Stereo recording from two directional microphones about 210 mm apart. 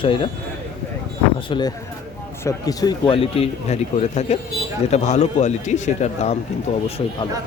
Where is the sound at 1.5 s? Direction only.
20° left (ahead or behind).